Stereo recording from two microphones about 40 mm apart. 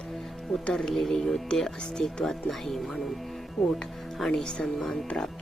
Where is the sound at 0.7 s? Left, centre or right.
Centre.